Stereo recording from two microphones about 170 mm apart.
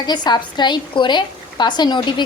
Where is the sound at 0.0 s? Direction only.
25° left (ahead or behind).